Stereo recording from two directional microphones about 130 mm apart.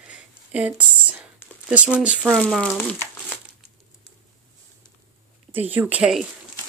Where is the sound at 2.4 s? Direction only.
Centre (ahead or behind).